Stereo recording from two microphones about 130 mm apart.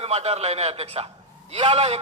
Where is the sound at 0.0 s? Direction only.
50° right (ahead or behind).